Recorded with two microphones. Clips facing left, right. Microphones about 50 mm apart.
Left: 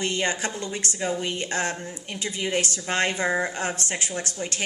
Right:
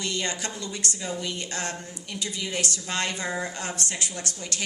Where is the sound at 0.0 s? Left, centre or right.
Left.